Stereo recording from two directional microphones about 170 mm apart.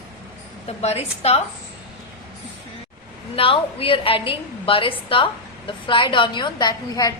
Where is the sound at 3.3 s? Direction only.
30° left (ahead or behind).